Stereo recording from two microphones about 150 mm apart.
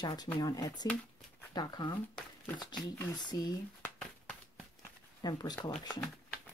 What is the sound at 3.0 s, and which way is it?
Speech, 30° left (ahead or behind).